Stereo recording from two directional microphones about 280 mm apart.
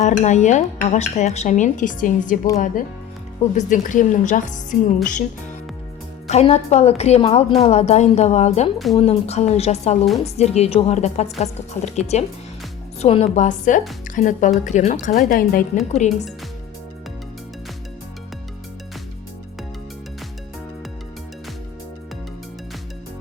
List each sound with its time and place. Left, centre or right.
0.0 s speech: left
3.5 s speech: left
6.2 s speech: left